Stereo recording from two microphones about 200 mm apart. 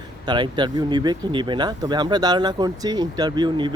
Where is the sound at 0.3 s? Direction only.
25° right (ahead or behind).